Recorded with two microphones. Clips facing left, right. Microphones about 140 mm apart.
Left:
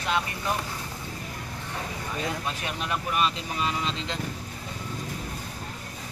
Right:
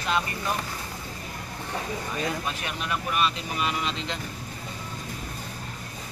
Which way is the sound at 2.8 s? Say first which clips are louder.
Even; 25° left (ahead or behind).